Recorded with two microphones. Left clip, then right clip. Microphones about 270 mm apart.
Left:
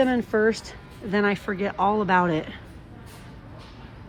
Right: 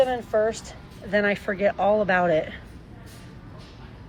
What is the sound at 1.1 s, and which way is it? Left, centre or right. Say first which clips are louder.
Speech: right 1 dB; centre.